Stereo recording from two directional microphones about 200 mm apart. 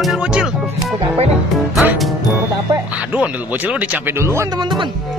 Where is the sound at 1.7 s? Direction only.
Centre (ahead or behind); by 4.9 s 20° right (ahead or behind).